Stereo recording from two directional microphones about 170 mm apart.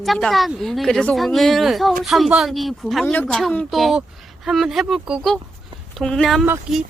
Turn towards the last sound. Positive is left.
turn(degrees=0)  # may be behind; listen again after turning